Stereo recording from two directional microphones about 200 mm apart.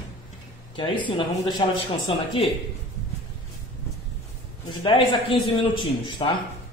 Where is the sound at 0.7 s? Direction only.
25° left (ahead or behind).